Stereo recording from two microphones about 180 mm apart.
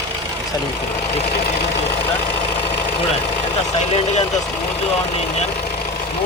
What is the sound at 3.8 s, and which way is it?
Speech, 35° left (ahead or behind).